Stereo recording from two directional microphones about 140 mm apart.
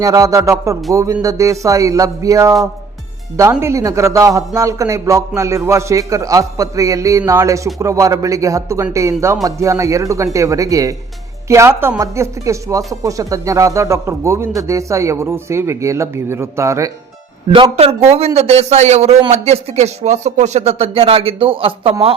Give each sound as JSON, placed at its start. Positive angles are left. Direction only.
{"t": 0.0, "sound": "a man's voice", "side_deg": -25}
{"t": 3.6, "sound": "a man's voice", "side_deg": -20}
{"t": 17.5, "sound": "speech", "side_deg": -40}